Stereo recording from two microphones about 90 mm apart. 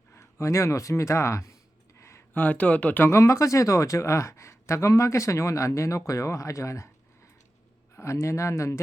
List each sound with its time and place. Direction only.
0.1 s speech: 30° left (ahead or behind)
2.0 s a sound: 30° left (ahead or behind)
2.3 s speech: 15° left (ahead or behind)
3.1 s speech: 35° left (ahead or behind)
7.9 s speech: 30° left (ahead or behind)